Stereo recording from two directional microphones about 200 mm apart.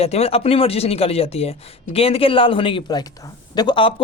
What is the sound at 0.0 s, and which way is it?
Speech, 30° left (ahead or behind).